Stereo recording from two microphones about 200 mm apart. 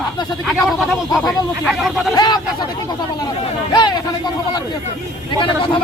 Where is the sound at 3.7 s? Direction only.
20° left (ahead or behind).